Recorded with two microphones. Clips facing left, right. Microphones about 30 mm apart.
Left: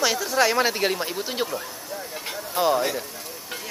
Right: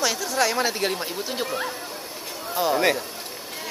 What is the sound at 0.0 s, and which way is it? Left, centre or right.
Speech, centre.